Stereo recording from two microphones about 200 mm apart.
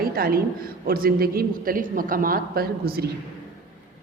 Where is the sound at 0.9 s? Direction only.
45° right (ahead or behind).